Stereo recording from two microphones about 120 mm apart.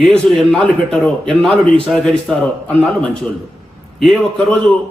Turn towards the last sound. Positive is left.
turn(degrees=10)  # may be behind; listen again after turning